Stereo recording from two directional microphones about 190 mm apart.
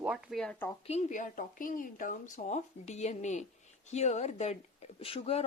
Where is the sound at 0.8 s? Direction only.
40° left (ahead or behind).